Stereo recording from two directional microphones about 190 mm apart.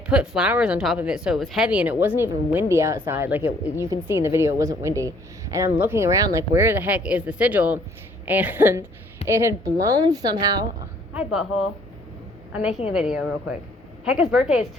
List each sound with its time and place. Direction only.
0.1 s a woman's voice: 5° right (ahead or behind); by 10.7 s 20° right (ahead or behind)
11.1 s a woman's voice: 5° right (ahead or behind)
12.9 s a woman's voice: 5° right (ahead or behind)